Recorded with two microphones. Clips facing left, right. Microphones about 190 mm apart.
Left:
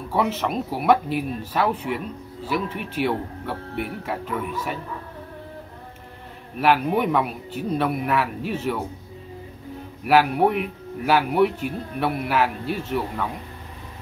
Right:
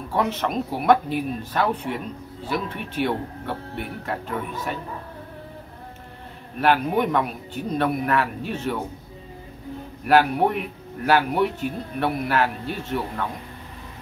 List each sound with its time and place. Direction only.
0.1 s a man's voice: 5° left (ahead or behind)
6.6 s a man's voice: 5° left (ahead or behind)
10.0 s a man's voice: 5° left (ahead or behind)